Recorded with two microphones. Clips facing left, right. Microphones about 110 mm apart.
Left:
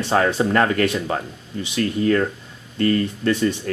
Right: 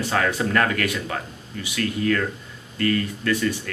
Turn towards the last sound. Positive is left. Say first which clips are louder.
# left 3 dB
turn(degrees=25)  # may be behind; listen again after turning